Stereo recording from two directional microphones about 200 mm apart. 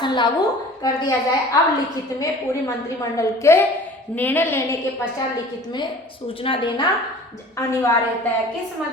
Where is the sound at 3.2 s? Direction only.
15° left (ahead or behind).